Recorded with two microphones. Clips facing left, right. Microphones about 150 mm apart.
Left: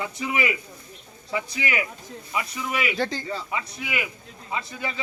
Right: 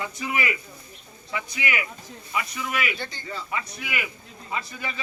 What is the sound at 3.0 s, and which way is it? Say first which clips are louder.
Speech: left 10 dB; 90° left.